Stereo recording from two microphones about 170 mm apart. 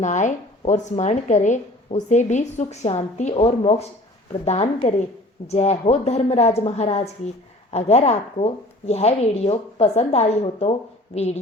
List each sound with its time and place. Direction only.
0.0 s a woman's voice: 45° left (ahead or behind)